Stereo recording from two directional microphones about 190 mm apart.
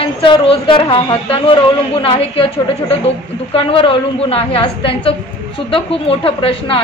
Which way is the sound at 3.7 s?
30° left (ahead or behind).